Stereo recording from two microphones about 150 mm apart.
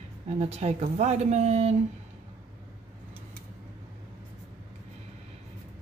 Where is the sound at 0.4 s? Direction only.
45° right (ahead or behind).